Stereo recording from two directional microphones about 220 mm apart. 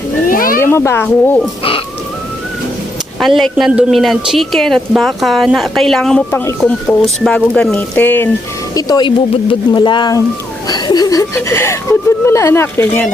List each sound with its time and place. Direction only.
0.3 s a sound: 40° left (ahead or behind)
0.6 s speech: 10° left (ahead or behind)
3.2 s a woman's voice: centre (ahead or behind)